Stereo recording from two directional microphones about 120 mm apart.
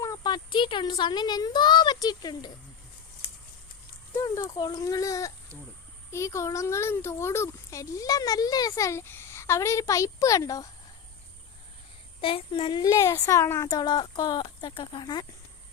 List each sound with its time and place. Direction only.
0.0 s speech: 30° left (ahead or behind)
4.1 s a child's voice: 25° left (ahead or behind)
12.2 s speech: 50° left (ahead or behind)
12.8 s a child's voice: 25° left (ahead or behind)
13.7 s speech: 35° left (ahead or behind)